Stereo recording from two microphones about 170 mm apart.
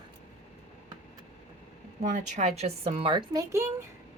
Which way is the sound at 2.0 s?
45° right (ahead or behind).